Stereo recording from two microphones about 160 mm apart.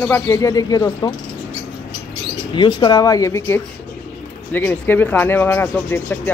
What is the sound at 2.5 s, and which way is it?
Speech, 30° left (ahead or behind).